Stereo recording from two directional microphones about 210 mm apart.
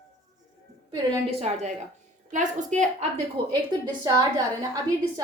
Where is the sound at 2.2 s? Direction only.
35° right (ahead or behind).